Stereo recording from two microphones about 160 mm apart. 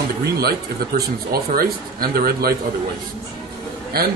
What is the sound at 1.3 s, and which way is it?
Speech, 70° right (ahead or behind).